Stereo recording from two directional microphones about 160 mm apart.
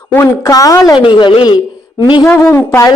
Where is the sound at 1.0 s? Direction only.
30° left (ahead or behind).